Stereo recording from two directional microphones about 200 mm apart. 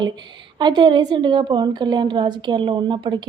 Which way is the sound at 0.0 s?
20° right (ahead or behind).